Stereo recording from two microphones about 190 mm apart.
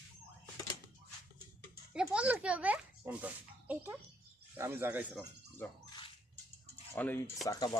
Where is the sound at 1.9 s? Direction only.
5° right (ahead or behind).